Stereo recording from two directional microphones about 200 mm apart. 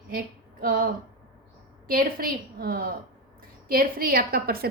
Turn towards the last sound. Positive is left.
turn(degrees=-50)  # may be behind; listen again after turning